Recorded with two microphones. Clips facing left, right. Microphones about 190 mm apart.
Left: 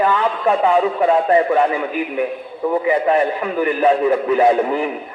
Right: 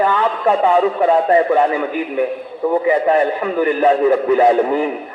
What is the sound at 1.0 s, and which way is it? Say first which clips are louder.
Speech: right 1 dB; 30° right (ahead or behind).